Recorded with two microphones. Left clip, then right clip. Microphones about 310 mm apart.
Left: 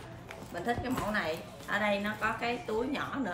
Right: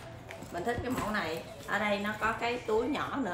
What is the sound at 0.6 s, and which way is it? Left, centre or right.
A woman's voice, centre.